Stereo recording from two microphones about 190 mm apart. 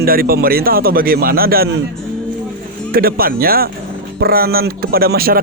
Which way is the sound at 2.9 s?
50° right (ahead or behind).